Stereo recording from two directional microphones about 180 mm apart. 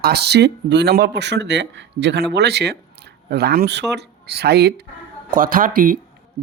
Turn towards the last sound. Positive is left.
turn(degrees=-50)  # may be behind; listen again after turning